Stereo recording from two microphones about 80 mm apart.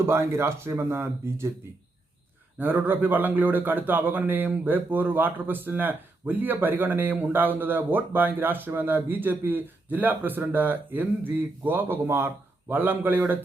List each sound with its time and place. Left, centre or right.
0.0 s speech: right
2.6 s a man's voice: right